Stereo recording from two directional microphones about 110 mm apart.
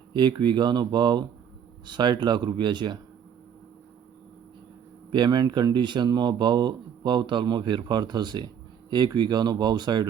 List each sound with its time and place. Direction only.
0.1 s speech: 45° right (ahead or behind)
5.1 s speech: 45° right (ahead or behind)